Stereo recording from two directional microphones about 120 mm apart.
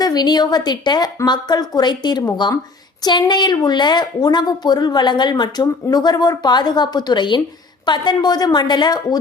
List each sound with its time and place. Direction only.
0.0 s a woman's voice: 35° left (ahead or behind)